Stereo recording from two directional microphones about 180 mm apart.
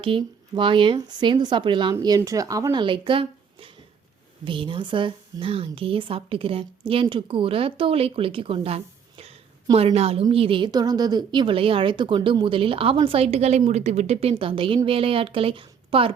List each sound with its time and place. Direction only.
0.0 s a woman's voice: 30° right (ahead or behind)